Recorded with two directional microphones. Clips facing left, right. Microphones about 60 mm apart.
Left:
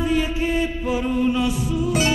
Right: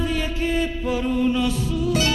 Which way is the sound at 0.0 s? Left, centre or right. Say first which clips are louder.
Left 3 dB; centre.